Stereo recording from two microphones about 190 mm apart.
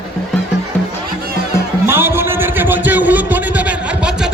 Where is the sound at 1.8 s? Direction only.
10° right (ahead or behind).